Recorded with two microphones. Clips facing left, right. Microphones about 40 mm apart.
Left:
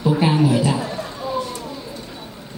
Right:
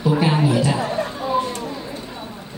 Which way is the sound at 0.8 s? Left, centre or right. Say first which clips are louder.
Right 4 dB; right.